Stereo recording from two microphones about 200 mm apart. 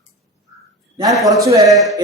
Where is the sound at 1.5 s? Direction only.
15° right (ahead or behind).